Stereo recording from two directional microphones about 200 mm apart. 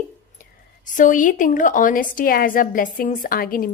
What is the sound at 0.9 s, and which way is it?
A woman's voice, 40° left (ahead or behind).